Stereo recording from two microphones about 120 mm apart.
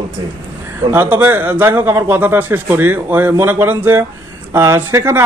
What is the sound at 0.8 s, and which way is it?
Speech, 15° right (ahead or behind).